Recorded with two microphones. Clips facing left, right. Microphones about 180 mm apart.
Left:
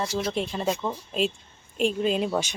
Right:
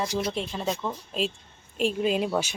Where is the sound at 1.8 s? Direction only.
5° right (ahead or behind).